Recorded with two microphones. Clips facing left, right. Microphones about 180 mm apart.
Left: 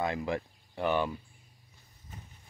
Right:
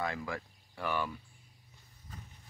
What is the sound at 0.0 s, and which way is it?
Speech, 20° left (ahead or behind).